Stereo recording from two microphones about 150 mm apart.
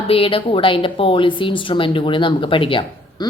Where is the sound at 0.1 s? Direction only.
40° left (ahead or behind).